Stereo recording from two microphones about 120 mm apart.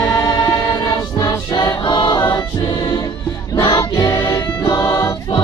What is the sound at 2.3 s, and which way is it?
Choir, 35° left (ahead or behind).